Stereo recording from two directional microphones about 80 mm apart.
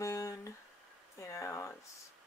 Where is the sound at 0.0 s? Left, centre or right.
Left.